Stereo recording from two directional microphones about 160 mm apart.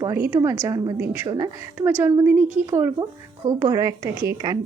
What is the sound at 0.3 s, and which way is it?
A woman's voice, 25° right (ahead or behind).